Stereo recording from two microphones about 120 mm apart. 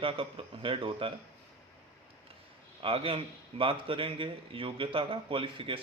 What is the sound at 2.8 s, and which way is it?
Speech, 50° right (ahead or behind).